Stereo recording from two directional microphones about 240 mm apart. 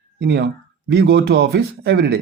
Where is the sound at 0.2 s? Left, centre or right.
Right.